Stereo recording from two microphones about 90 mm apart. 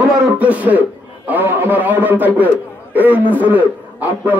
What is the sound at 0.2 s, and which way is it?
A man's voice, 15° right (ahead or behind).